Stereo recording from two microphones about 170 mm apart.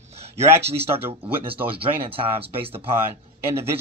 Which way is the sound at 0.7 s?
35° right (ahead or behind).